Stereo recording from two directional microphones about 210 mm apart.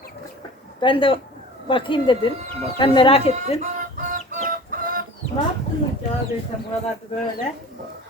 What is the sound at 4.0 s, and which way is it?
Chicken, 40° right (ahead or behind).